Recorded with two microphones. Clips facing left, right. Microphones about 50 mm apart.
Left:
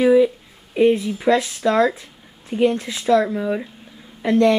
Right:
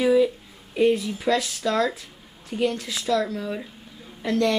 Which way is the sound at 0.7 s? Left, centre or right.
Centre.